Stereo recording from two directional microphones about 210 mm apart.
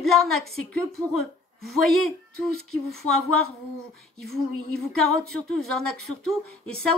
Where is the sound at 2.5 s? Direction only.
90° left.